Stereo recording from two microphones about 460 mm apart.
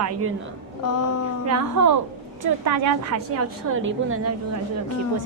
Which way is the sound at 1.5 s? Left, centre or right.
Right.